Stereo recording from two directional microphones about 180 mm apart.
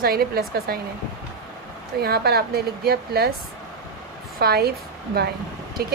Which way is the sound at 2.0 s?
60° right (ahead or behind).